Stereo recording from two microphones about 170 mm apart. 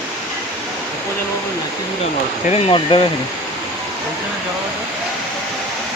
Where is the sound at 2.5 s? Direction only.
30° left (ahead or behind).